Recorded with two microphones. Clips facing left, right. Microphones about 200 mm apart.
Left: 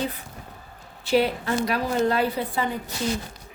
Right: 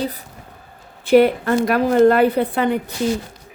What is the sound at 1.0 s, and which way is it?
A woman's voice, 55° right (ahead or behind).